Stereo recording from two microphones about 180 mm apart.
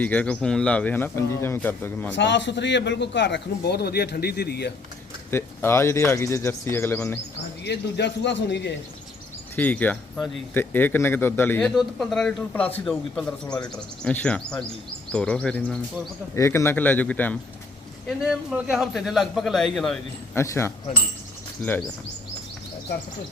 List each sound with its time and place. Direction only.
0.0 s speech: 10° left (ahead or behind)
2.1 s a man's voice: 80° left; by 4.7 s 65° left (ahead or behind)
5.3 s speech: 15° left (ahead or behind)
7.6 s a man's voice: 70° left (ahead or behind)
9.6 s speech: 10° left (ahead or behind)
11.7 s a man's voice: centre (ahead or behind)
16.3 s speech: 15° left (ahead or behind)
18.2 s a man's voice: 5° right (ahead or behind)
20.3 s speech: 15° left (ahead or behind)